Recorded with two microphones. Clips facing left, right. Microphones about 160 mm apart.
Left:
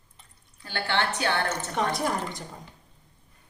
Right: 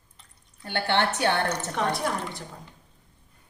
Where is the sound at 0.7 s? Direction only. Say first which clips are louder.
Right 3 dB; 20° right (ahead or behind).